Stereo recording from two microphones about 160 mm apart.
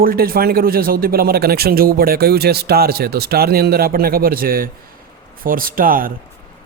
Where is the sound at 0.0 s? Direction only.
65° right (ahead or behind).